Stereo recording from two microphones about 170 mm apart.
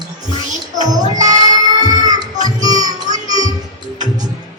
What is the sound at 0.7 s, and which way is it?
Child singing, 20° right (ahead or behind).